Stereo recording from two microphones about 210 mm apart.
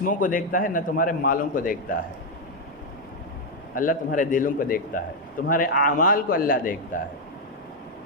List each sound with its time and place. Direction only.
0.0 s a man's voice: 40° left (ahead or behind)
3.8 s a man's voice: 40° left (ahead or behind)